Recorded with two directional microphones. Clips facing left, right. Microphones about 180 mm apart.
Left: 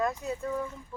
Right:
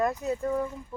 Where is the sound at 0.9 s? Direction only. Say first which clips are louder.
Right 3 dB; 20° right (ahead or behind).